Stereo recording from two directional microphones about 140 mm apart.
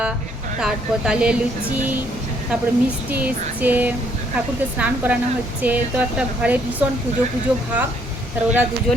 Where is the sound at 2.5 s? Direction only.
10° right (ahead or behind).